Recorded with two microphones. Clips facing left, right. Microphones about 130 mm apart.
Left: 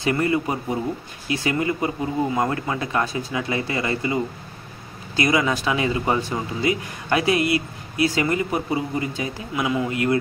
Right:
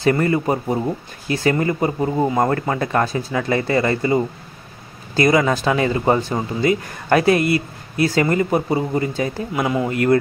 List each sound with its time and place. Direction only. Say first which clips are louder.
0.0 s speech: right 4 dB; 40° right (ahead or behind)